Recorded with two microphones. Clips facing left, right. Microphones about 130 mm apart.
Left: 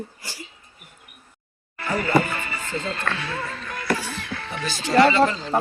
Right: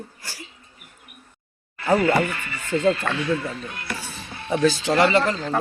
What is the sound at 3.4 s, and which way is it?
Speech, 90° left.